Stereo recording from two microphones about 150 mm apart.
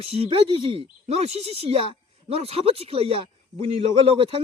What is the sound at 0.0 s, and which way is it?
Speech, 40° right (ahead or behind).